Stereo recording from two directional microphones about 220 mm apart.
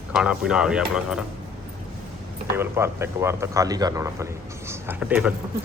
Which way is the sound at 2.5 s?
10° right (ahead or behind).